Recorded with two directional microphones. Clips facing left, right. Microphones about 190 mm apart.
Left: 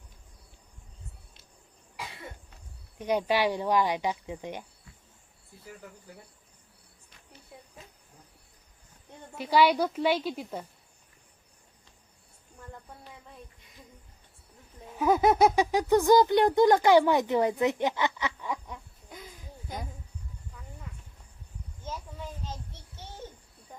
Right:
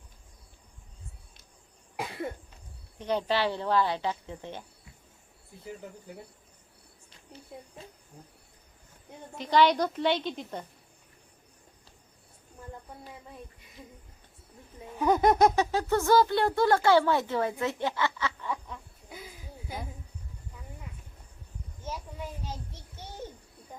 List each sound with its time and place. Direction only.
3.0 s a child's voice: 10° left (ahead or behind)
7.8 s cricket: 30° right (ahead or behind)
9.4 s a child's voice: 10° left (ahead or behind)
14.9 s a child's voice: 5° left (ahead or behind)
19.0 s a sound: 5° right (ahead or behind)
21.8 s a sound: 10° right (ahead or behind)